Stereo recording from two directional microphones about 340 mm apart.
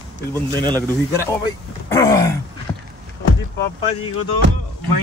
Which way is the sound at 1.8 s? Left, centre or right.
Centre.